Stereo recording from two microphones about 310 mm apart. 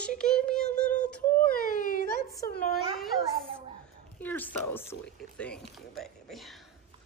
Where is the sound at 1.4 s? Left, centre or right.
Left.